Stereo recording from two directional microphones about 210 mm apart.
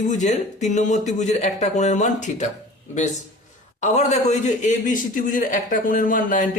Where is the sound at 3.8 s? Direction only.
35° left (ahead or behind).